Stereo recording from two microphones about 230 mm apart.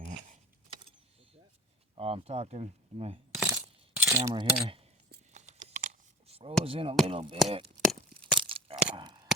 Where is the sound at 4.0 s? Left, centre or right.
Centre.